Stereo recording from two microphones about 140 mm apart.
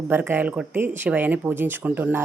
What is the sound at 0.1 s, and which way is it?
Speech, 15° right (ahead or behind).